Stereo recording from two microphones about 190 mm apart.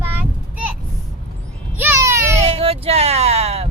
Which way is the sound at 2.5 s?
30° right (ahead or behind).